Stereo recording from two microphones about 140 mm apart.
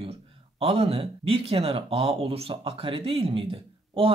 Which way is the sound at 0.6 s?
40° right (ahead or behind).